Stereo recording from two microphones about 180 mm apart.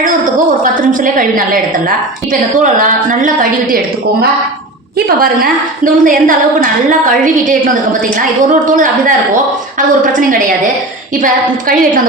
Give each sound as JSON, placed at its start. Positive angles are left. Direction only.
{"t": 0.0, "sound": "a sound", "side_deg": -45}
{"t": 2.8, "sound": "a woman's voice", "side_deg": -45}
{"t": 4.9, "sound": "a woman's voice", "side_deg": -55}